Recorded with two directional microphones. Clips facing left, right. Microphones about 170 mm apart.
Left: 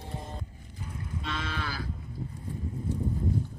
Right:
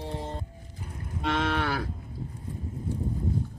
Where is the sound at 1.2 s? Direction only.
70° right (ahead or behind).